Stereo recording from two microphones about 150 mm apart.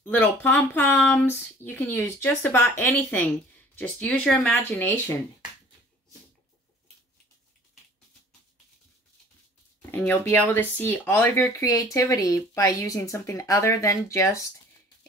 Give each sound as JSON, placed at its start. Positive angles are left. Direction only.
{"t": 0.0, "sound": "speech", "side_deg": 10}
{"t": 9.8, "sound": "speech", "side_deg": 15}